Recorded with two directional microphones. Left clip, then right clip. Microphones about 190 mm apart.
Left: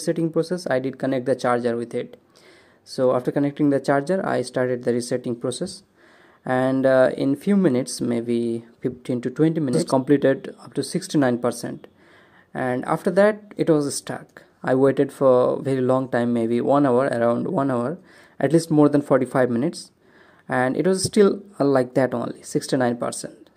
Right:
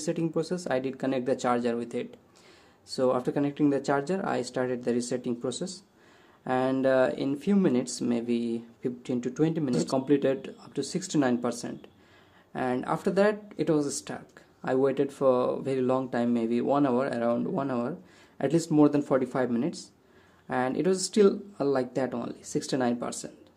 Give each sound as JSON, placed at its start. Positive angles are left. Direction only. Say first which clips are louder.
{"t": 0.0, "sound": "speech", "louder": "left 7 dB", "side_deg": 25}